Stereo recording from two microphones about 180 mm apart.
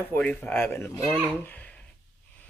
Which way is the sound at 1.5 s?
5° left (ahead or behind).